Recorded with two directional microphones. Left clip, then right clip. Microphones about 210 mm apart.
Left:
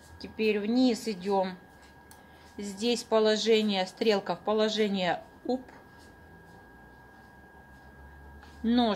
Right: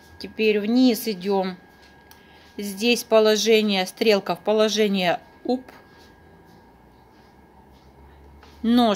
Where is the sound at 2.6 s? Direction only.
50° right (ahead or behind).